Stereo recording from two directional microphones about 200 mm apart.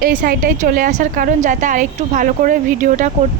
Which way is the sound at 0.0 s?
45° right (ahead or behind).